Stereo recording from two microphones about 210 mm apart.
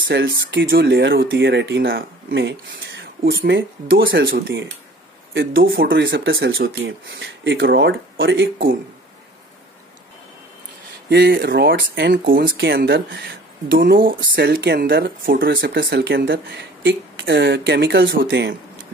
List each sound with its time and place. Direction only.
0.1 s speech: 55° right (ahead or behind)
11.1 s speech: 50° right (ahead or behind)